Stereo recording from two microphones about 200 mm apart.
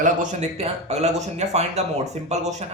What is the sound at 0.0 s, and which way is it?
Speech, 35° right (ahead or behind).